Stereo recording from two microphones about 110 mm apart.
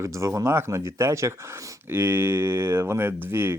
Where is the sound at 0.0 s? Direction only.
25° right (ahead or behind).